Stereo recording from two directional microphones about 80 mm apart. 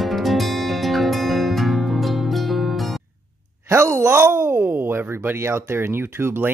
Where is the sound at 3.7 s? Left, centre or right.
Right.